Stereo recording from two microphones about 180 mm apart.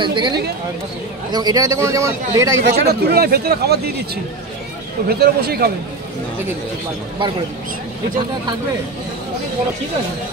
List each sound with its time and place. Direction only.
0.0 s a man's voice: 25° right (ahead or behind)
2.6 s speech: 60° right (ahead or behind)